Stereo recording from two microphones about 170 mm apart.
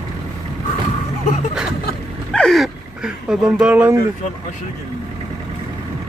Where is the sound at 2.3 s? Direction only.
Centre (ahead or behind).